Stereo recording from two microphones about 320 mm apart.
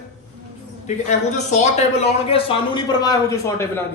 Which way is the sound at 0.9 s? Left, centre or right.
Left.